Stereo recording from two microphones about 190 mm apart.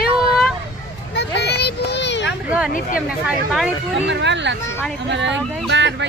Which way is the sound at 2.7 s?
45° left (ahead or behind).